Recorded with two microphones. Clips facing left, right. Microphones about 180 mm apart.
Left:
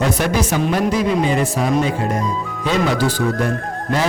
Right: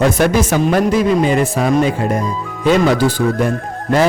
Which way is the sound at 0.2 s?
50° right (ahead or behind).